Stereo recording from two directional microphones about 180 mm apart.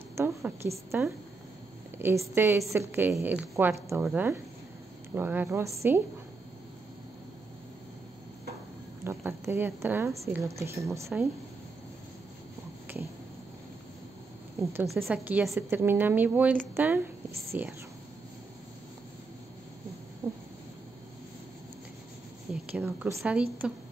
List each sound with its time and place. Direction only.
0.1 s a woman's voice: 15° right (ahead or behind)
9.0 s a woman's voice: 15° right (ahead or behind)
14.6 s a woman's voice: 15° right (ahead or behind)
20.2 s a sound: 20° right (ahead or behind)
22.5 s speech: 10° right (ahead or behind)